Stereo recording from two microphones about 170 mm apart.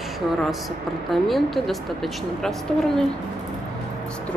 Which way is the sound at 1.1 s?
Centre (ahead or behind).